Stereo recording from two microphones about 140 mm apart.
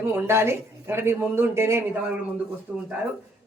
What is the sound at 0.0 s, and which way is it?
A man's voice, 15° right (ahead or behind).